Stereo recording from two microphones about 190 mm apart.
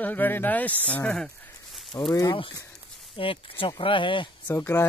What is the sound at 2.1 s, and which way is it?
Speech, 25° left (ahead or behind).